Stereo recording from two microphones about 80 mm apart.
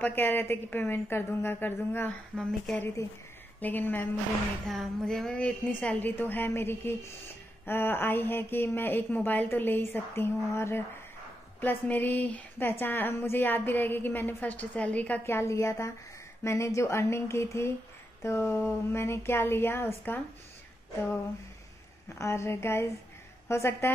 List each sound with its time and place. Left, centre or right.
0.0 s speech: left
2.3 s speech: centre
3.6 s speech: left
4.6 s speech: centre; by 10.8 s left
11.6 s speech: left
15.2 s a sound: left
18.2 s speech: left
22.2 s a sound: left